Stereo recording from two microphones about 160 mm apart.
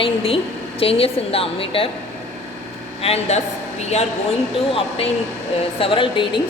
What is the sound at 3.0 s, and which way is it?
Speech, 40° left (ahead or behind).